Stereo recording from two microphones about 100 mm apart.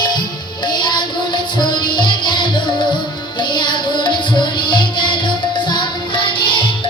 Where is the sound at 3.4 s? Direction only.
50° left (ahead or behind).